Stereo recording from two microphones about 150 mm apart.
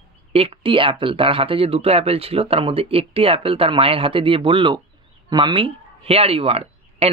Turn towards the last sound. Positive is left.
turn(degrees=-40)  # may be behind; listen again after turning